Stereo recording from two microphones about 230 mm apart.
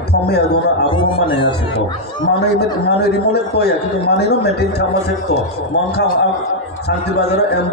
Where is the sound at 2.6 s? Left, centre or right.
Left.